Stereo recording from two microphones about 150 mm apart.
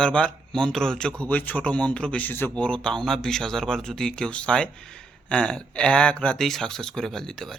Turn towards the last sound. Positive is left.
turn(degrees=5)  # may be behind; listen again after turning